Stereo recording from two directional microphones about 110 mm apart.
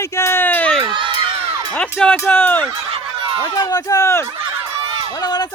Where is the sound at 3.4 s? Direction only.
35° left (ahead or behind).